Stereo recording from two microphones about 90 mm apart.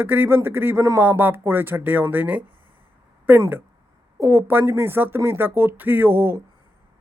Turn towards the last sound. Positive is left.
turn(degrees=-25)  # may be behind; listen again after turning